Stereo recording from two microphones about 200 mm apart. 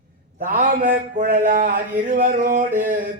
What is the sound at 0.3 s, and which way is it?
Speech, 45° right (ahead or behind).